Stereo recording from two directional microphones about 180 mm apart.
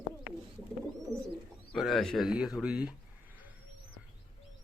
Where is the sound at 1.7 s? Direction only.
Centre (ahead or behind).